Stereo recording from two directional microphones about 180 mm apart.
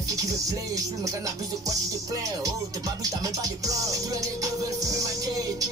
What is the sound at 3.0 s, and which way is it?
Music, 20° right (ahead or behind).